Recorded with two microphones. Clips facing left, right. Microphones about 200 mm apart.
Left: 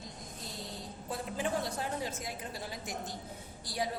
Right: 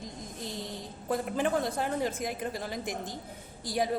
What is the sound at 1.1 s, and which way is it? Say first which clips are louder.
A woman's voice: right 6 dB; 55° right (ahead or behind).